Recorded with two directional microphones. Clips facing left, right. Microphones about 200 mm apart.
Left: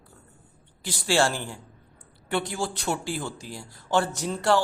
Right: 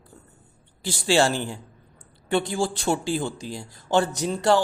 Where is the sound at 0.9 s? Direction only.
20° right (ahead or behind).